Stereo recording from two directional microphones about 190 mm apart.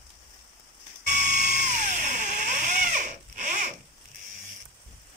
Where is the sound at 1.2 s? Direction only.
40° right (ahead or behind).